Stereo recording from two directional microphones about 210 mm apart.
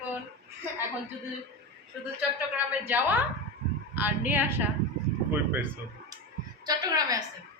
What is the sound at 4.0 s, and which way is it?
Speech, 10° right (ahead or behind).